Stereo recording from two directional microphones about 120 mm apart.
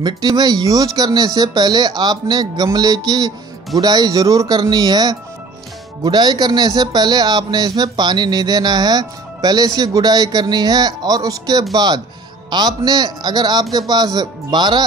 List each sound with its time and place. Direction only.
0.0 s speech: 35° right (ahead or behind)